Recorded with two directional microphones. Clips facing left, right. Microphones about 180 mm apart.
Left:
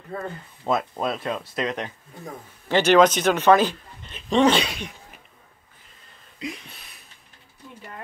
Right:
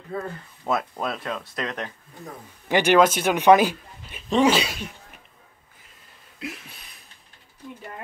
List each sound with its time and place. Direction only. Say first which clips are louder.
0.7 s speech: left 2 dB; 20° left (ahead or behind)
1.0 s speech: left 3 dB; 5° left (ahead or behind)
2.7 s speech: left 1 dB; 10° right (ahead or behind)
6.4 s a sound: left 2 dB; 5° right (ahead or behind)